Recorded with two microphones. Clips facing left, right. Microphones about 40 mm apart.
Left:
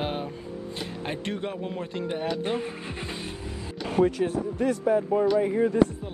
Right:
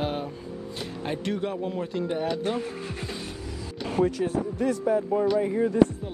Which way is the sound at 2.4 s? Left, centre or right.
Centre.